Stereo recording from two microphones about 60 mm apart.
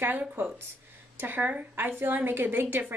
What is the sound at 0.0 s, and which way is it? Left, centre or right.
Speech, right.